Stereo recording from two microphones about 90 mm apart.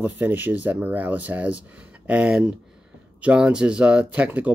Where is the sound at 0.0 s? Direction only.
20° right (ahead or behind).